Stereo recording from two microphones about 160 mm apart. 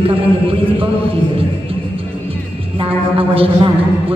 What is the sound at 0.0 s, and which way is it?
Speech, 35° right (ahead or behind).